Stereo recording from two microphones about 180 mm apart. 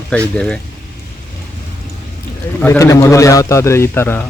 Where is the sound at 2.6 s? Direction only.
15° left (ahead or behind).